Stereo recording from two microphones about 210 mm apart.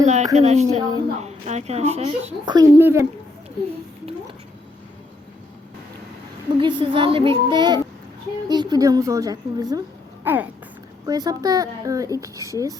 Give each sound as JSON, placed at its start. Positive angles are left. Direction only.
{"t": 0.0, "sound": "a woman's voice", "side_deg": -35}
{"t": 6.6, "sound": "a child's voice", "side_deg": -25}